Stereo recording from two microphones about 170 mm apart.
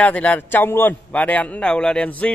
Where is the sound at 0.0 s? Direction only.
10° left (ahead or behind).